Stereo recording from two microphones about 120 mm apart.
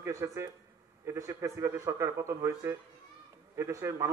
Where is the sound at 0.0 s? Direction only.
25° right (ahead or behind).